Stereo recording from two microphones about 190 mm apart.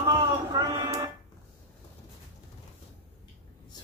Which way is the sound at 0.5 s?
20° right (ahead or behind).